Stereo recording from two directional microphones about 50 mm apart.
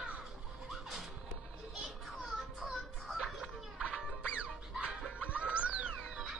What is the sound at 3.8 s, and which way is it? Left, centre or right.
Music, right.